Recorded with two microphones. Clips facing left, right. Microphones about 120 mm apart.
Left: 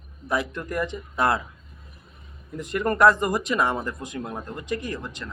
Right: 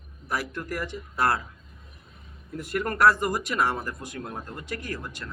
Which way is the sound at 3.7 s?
20° left (ahead or behind).